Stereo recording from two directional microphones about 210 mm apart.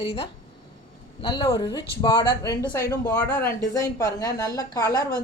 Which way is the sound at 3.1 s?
10° left (ahead or behind).